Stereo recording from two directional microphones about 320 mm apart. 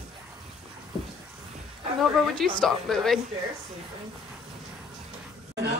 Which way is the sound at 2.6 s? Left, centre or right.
Centre.